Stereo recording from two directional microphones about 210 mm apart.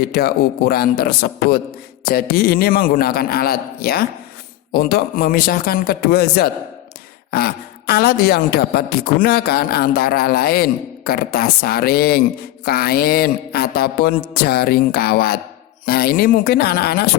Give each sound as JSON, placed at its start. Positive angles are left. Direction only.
{"t": 0.1, "sound": "a woman's voice", "side_deg": 45}